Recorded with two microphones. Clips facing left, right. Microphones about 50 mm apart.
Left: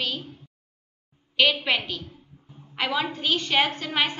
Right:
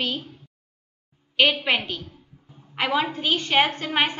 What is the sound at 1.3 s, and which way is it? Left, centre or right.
A woman's voice, centre.